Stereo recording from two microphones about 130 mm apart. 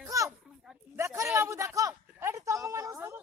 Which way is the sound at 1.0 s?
25° right (ahead or behind).